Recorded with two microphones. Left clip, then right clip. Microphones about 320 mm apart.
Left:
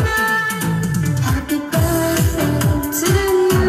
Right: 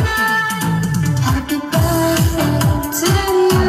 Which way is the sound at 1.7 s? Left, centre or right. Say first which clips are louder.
Right 3 dB; centre.